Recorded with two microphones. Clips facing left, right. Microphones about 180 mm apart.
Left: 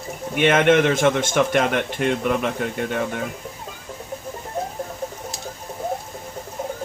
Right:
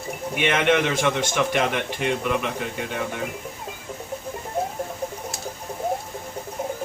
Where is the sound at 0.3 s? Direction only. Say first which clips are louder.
Left 5 dB; 50° left (ahead or behind).